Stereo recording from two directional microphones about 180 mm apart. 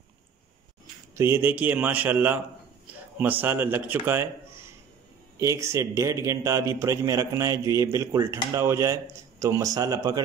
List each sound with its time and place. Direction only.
1.1 s a man's voice: 15° right (ahead or behind)